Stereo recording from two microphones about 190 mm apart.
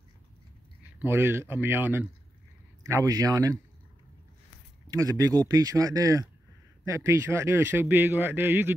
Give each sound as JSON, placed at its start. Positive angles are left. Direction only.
{"t": 0.9, "sound": "a man's voice", "side_deg": -10}
{"t": 4.8, "sound": "a man's voice", "side_deg": -15}